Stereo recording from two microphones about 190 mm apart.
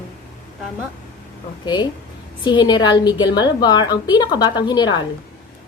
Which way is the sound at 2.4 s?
25° left (ahead or behind).